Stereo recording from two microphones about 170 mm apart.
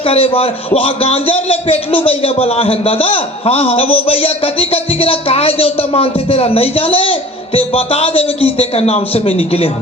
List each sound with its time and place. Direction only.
0.1 s speech: 35° left (ahead or behind)